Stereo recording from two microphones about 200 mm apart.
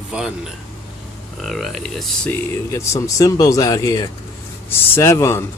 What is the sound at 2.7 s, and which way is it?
Speech, 15° left (ahead or behind).